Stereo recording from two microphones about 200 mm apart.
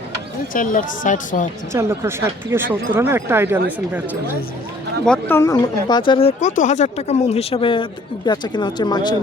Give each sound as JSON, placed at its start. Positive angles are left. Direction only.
{"t": 0.5, "sound": "speech", "side_deg": 40}
{"t": 1.7, "sound": "speech", "side_deg": -15}
{"t": 5.0, "sound": "speech", "side_deg": 5}